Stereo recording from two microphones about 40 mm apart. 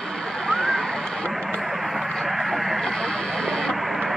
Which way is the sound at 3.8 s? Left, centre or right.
Centre.